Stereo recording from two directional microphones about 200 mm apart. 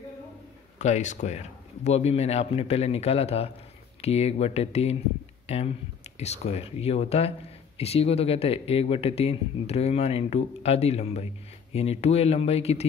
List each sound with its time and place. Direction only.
0.7 s speech: 35° left (ahead or behind)